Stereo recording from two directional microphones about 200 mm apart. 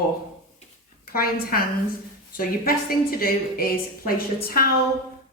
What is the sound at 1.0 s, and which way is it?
A woman's voice, 50° left (ahead or behind).